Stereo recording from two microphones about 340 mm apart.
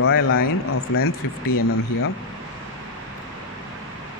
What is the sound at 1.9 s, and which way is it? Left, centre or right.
Speech, left.